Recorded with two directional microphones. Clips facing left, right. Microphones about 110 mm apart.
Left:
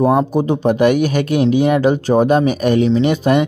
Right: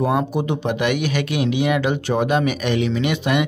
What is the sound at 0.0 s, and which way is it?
Speech, 35° left (ahead or behind).